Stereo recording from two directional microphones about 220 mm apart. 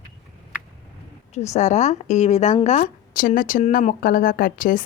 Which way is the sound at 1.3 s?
30° left (ahead or behind).